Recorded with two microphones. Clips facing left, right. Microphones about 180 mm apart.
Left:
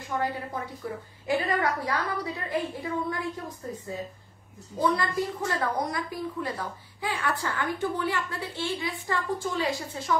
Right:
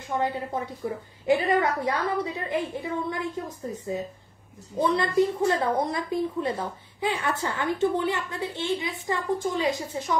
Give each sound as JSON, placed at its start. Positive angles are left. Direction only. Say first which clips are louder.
{"t": 0.2, "sound": "a woman's voice", "louder": "right 3 dB", "side_deg": -25}